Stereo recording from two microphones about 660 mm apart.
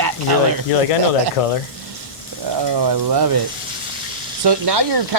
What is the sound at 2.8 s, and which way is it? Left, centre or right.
Speech, right.